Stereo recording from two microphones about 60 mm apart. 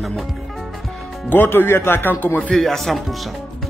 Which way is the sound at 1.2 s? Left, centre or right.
Left.